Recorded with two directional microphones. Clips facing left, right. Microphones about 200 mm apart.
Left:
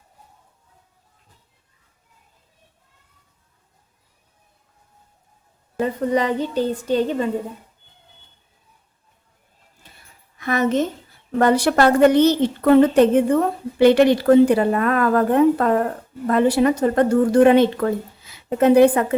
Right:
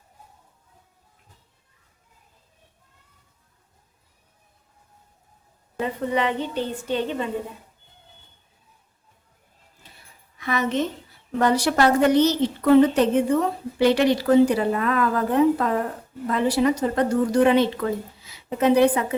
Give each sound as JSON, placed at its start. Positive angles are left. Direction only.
{"t": 5.8, "sound": "a woman's voice", "side_deg": 40}
{"t": 10.3, "sound": "a woman's voice", "side_deg": 50}